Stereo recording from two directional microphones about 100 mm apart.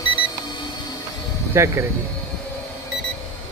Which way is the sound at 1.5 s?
30° right (ahead or behind).